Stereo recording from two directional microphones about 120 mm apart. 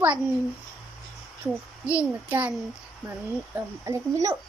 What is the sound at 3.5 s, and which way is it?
Speech, 25° right (ahead or behind).